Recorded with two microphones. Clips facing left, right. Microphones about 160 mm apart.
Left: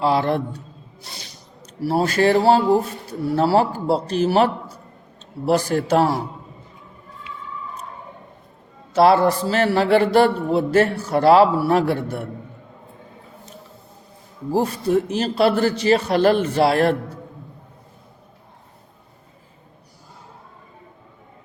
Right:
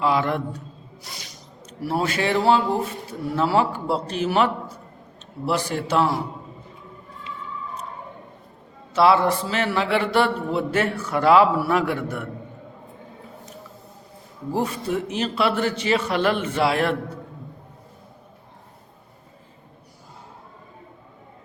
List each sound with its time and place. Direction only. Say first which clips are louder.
0.0 s a man's voice: left 3 dB; 35° left (ahead or behind)
8.9 s a man's voice: left 3 dB; 40° left (ahead or behind)
14.5 s a man's voice: left 6 dB; 40° left (ahead or behind)